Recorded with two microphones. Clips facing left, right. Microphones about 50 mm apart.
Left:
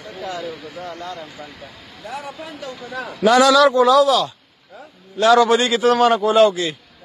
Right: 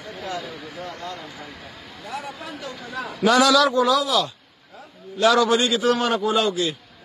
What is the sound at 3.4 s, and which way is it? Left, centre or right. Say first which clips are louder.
Speech: left 5 dB; left.